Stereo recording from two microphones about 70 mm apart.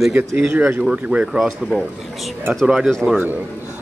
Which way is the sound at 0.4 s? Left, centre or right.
Centre.